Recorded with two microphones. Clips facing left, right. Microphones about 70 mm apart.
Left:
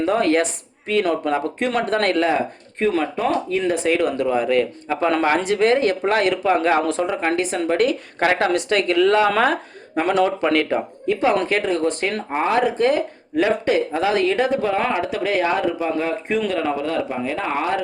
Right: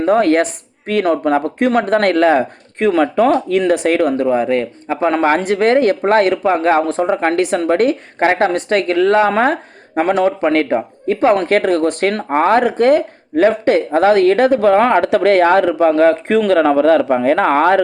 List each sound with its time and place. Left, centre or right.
0.0 s speech: right
4.3 s a woman's voice: right
5.4 s a woman's voice: right
8.2 s a woman's voice: right
15.0 s speech: right